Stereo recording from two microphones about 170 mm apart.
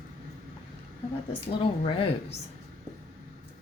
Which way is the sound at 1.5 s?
35° left (ahead or behind).